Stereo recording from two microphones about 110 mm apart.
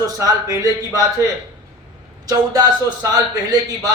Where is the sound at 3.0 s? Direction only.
35° right (ahead or behind).